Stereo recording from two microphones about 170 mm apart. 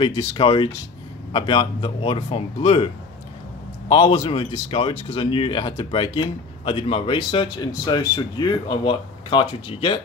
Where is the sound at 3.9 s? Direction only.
30° left (ahead or behind).